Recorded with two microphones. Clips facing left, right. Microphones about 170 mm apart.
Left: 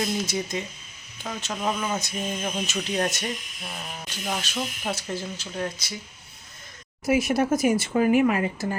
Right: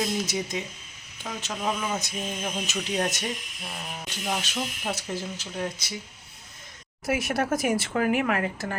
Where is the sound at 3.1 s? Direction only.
15° right (ahead or behind).